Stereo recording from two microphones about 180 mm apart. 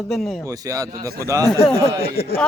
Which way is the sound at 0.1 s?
Centre (ahead or behind).